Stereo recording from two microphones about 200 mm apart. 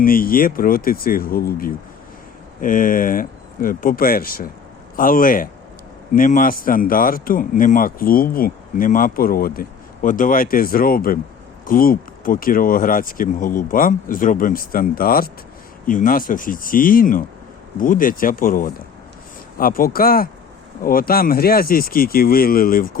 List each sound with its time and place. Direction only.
0.0 s speech: 45° left (ahead or behind)